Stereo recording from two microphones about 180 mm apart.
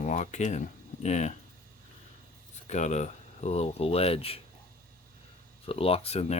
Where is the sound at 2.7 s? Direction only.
40° left (ahead or behind).